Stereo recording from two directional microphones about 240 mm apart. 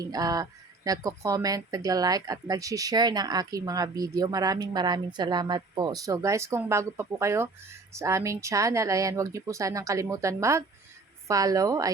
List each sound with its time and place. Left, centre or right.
0.0 s speech: centre